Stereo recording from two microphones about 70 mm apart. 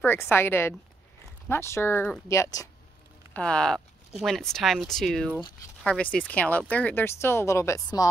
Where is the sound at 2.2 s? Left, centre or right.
Left.